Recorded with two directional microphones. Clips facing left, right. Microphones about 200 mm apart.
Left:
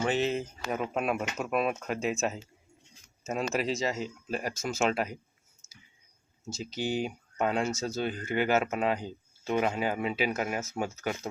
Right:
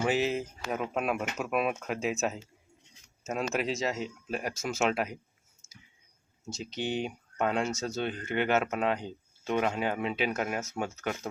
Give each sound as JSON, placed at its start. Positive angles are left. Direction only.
{"t": 0.0, "sound": "speech", "side_deg": -5}
{"t": 5.6, "sound": "a sound", "side_deg": -20}
{"t": 6.5, "sound": "speech", "side_deg": 0}